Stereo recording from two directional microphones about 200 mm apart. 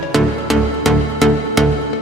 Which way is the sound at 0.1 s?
Centre (ahead or behind).